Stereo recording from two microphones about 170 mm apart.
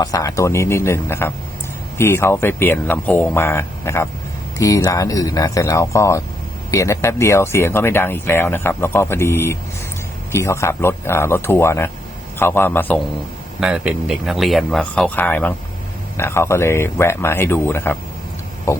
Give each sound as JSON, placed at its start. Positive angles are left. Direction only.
{"t": 0.0, "sound": "speech", "side_deg": 20}
{"t": 13.6, "sound": "speech", "side_deg": -5}
{"t": 18.7, "sound": "hum", "side_deg": 15}